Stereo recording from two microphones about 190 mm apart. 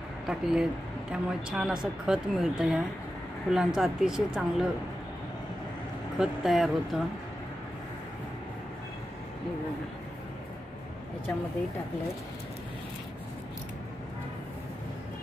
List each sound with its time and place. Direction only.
0.3 s speech: 5° right (ahead or behind)
6.1 s speech: centre (ahead or behind)